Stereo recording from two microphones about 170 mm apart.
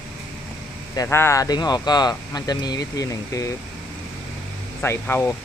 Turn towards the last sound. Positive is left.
turn(degrees=15)  # may be behind; listen again after turning